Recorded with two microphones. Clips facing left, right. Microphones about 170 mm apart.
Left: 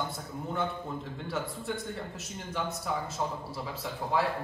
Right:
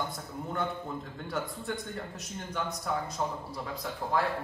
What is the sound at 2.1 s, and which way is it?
A man's voice, 5° left (ahead or behind).